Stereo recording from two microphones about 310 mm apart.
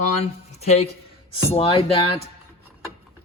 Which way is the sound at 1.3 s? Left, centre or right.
Centre.